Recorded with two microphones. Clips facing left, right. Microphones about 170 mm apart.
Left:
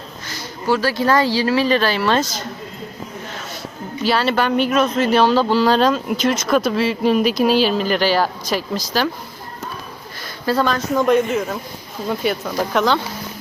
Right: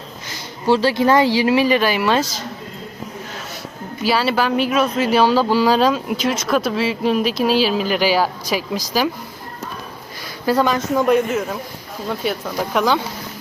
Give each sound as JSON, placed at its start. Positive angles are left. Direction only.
{"t": 0.7, "sound": "speech", "side_deg": -25}
{"t": 4.0, "sound": "speech", "side_deg": -5}
{"t": 10.4, "sound": "speech", "side_deg": -15}